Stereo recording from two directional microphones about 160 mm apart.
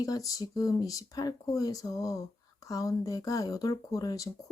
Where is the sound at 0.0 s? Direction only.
20° left (ahead or behind).